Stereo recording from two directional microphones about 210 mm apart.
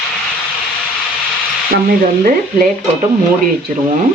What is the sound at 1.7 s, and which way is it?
Speech, 45° right (ahead or behind).